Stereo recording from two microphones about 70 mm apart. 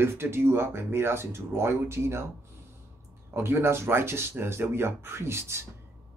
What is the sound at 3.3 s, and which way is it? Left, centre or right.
Speech, right.